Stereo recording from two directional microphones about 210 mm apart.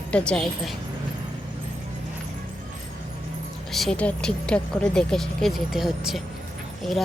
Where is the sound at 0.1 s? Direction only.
5° left (ahead or behind).